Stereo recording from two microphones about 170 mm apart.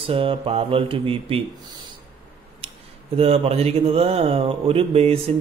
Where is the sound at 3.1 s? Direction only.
35° right (ahead or behind).